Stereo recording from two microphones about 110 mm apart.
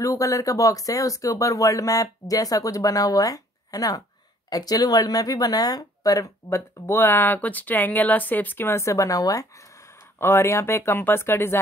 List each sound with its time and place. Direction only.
0.0 s a woman's voice: 30° left (ahead or behind)